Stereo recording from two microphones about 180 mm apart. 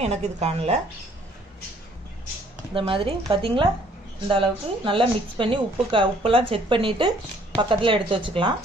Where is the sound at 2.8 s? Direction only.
30° right (ahead or behind).